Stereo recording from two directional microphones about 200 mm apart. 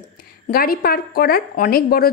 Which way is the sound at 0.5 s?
50° left (ahead or behind).